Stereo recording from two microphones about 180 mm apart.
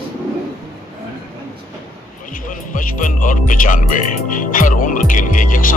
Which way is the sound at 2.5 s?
45° left (ahead or behind).